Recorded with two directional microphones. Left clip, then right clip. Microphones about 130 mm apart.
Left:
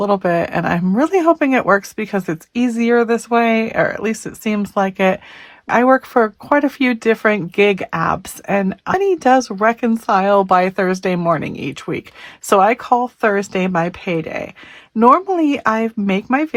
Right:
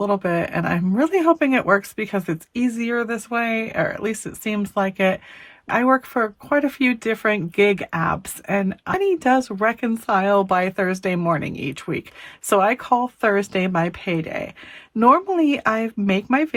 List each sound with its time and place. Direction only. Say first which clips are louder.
0.0 s speech: left 5 dB; 25° left (ahead or behind)